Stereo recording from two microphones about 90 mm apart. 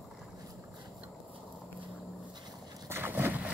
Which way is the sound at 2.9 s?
25° right (ahead or behind).